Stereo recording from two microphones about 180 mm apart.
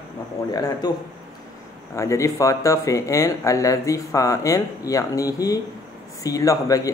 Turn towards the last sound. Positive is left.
turn(degrees=20)  # may be behind; listen again after turning